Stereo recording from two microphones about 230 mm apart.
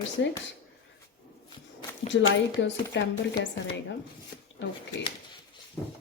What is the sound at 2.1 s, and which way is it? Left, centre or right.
Speech, left.